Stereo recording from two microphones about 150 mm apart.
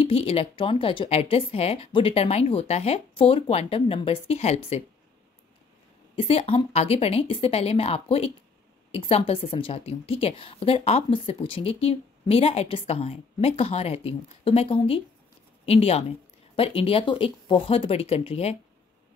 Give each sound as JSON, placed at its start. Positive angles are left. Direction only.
{"t": 0.0, "sound": "a woman's voice", "side_deg": 40}
{"t": 6.1, "sound": "a woman's voice", "side_deg": 40}